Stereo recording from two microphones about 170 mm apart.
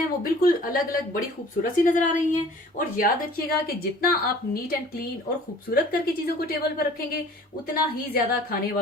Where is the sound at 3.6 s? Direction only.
60° left (ahead or behind).